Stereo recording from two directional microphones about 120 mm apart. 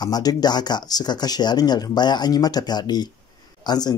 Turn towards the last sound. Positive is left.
turn(degrees=35)  # may be behind; listen again after turning